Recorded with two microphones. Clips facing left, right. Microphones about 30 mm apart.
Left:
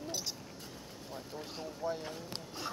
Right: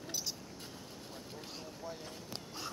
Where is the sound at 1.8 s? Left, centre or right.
Left.